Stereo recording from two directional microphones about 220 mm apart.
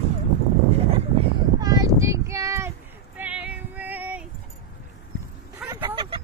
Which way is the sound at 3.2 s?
5° right (ahead or behind).